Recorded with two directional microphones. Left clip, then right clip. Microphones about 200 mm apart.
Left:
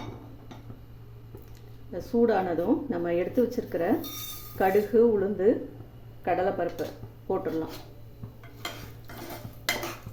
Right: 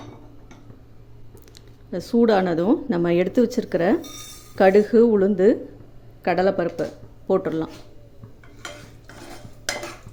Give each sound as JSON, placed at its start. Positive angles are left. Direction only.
{"t": 1.9, "sound": "speech", "side_deg": -50}